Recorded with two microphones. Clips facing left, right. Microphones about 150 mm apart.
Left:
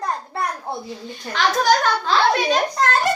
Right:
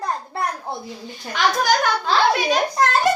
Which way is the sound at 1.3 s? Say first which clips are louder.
Left 1 dB; 10° right (ahead or behind).